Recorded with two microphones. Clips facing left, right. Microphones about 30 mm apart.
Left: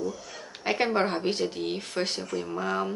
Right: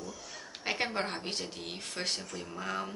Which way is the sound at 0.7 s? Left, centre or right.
Centre.